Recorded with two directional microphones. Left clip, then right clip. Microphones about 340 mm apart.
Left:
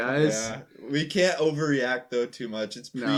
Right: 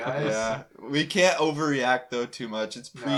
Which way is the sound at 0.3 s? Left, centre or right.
Centre.